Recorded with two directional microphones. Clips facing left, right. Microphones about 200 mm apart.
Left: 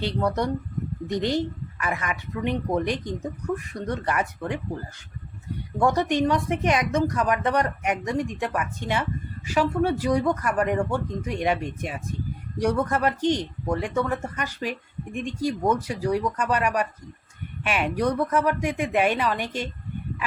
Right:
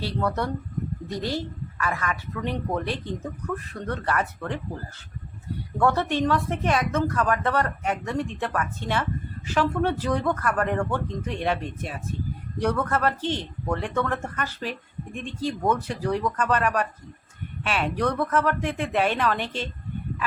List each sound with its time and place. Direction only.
0.0 s a man's voice: 15° left (ahead or behind)
5.7 s a man's voice: 15° left (ahead or behind)